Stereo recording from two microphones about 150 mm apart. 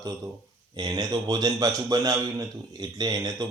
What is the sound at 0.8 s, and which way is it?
A man's voice, 25° right (ahead or behind).